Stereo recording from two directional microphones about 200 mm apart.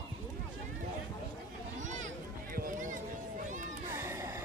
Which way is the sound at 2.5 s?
40° right (ahead or behind).